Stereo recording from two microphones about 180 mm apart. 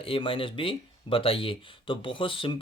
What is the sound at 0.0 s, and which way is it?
Speech, 30° left (ahead or behind).